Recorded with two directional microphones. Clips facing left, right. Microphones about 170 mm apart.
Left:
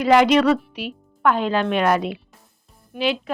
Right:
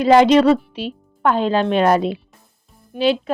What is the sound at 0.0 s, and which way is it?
Speech, 30° right (ahead or behind).